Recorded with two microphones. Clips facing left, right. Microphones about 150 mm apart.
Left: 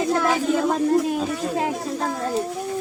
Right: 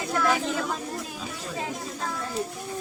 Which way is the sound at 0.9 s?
60° left (ahead or behind).